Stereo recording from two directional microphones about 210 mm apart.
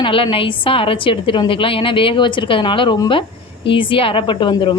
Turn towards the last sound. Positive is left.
turn(degrees=20)  # may be behind; listen again after turning